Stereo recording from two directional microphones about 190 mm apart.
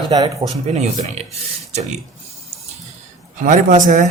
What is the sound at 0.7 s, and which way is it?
Speech, 35° right (ahead or behind).